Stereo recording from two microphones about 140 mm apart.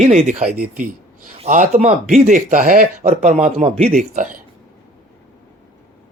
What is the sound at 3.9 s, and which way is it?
Speech, 70° right (ahead or behind).